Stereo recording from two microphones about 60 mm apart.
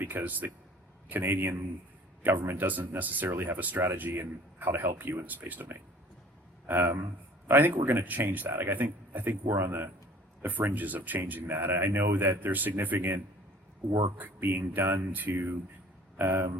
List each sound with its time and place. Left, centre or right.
0.0 s a man's voice: right
3.0 s speech: right
3.2 s a man's voice: right
9.5 s a man's voice: right
14.2 s a man's voice: right